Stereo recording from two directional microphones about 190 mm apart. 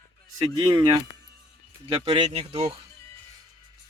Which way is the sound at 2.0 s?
30° right (ahead or behind).